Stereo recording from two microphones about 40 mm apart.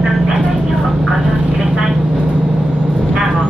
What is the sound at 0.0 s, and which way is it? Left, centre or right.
Vehicle, centre.